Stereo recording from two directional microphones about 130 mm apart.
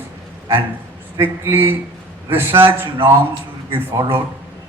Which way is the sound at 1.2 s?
15° right (ahead or behind).